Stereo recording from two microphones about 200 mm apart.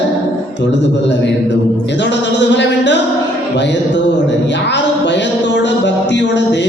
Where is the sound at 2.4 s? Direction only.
60° left (ahead or behind).